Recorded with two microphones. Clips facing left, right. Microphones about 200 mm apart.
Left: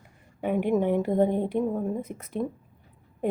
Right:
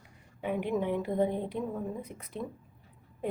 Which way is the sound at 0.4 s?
55° left (ahead or behind).